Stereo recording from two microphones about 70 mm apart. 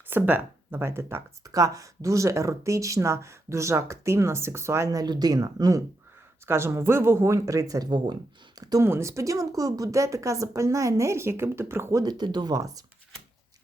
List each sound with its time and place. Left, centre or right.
0.1 s speech: right
1.5 s speech: right
4.9 s speech: right
6.4 s a woman's voice: right
7.3 s speech: right
7.9 s speech: right
8.5 s speech: right
8.8 s speech: right
12.0 s speech: right